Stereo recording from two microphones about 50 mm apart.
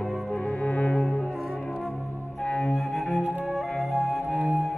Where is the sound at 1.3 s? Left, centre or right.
Centre.